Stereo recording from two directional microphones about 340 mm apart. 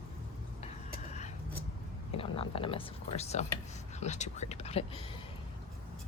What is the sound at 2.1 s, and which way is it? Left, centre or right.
A woman's voice, centre.